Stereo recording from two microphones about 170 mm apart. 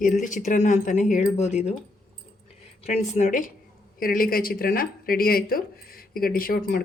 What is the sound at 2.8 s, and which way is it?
Speech, 45° left (ahead or behind).